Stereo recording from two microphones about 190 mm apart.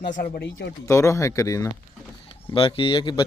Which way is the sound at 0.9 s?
15° left (ahead or behind).